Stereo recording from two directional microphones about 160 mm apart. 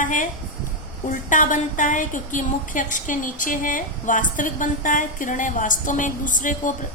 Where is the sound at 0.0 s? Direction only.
55° left (ahead or behind).